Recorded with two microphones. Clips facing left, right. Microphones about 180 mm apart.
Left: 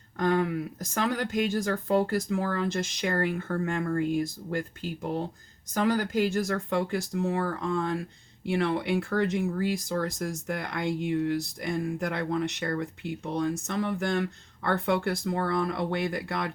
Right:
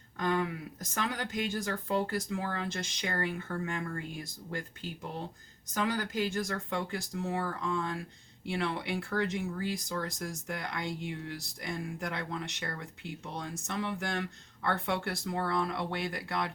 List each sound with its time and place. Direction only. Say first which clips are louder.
0.2 s speech: left 6 dB; 45° left (ahead or behind)
5.7 s speech: left 6 dB; 45° left (ahead or behind)